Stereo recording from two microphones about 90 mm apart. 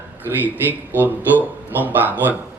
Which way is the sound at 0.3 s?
20° right (ahead or behind).